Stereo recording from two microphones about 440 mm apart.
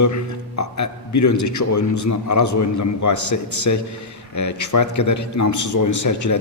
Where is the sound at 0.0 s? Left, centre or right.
Left.